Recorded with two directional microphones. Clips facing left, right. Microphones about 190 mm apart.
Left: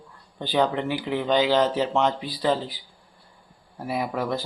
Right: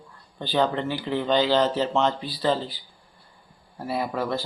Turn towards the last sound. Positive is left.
turn(degrees=10)  # may be behind; listen again after turning